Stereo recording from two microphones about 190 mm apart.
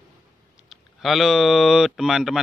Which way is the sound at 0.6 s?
Centre (ahead or behind).